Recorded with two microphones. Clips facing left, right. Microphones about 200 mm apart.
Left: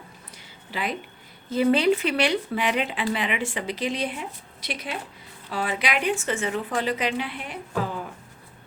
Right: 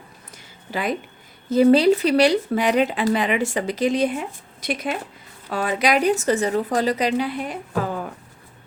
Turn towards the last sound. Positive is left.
turn(degrees=-45)  # may be behind; listen again after turning